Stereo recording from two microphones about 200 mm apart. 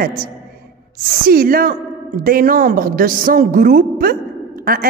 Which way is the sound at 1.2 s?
45° right (ahead or behind).